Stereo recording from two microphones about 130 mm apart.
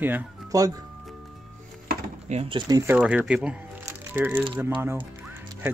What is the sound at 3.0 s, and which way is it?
Speech, 10° right (ahead or behind).